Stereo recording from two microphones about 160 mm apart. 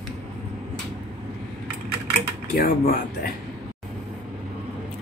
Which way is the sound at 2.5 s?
70° left (ahead or behind).